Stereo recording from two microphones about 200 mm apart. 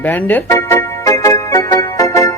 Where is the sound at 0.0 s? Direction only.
10° left (ahead or behind).